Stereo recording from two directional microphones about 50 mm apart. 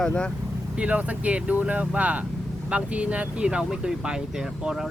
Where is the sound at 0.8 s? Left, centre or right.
Right.